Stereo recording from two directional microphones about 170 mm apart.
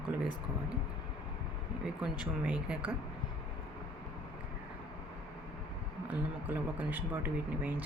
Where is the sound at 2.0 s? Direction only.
5° right (ahead or behind).